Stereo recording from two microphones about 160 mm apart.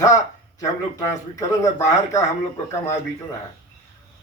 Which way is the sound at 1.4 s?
20° left (ahead or behind).